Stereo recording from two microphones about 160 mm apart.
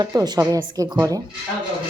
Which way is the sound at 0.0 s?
25° right (ahead or behind).